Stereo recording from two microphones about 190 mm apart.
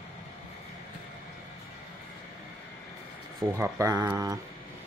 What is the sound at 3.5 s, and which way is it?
Speech, 15° right (ahead or behind).